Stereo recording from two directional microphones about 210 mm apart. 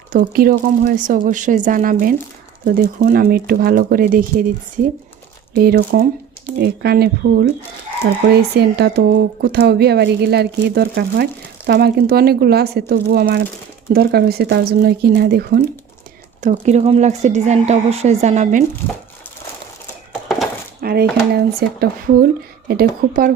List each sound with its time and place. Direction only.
0.1 s speech: 40° right (ahead or behind)
5.5 s speech: 45° right (ahead or behind)
16.4 s speech: 35° right (ahead or behind)
20.8 s speech: 50° right (ahead or behind)